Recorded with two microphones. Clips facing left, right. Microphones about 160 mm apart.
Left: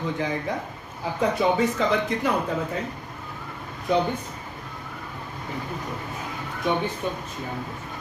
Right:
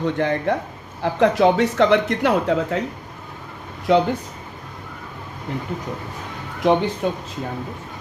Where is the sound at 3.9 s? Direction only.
80° right.